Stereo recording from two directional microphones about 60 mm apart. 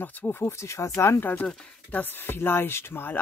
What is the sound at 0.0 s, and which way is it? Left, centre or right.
Speech, left.